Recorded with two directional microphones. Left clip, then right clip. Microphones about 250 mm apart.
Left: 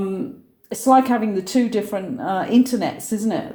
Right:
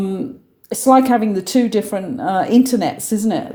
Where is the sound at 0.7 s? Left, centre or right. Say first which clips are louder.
Right 3 dB; right.